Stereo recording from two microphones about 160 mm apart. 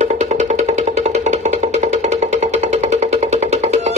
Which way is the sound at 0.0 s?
45° right (ahead or behind).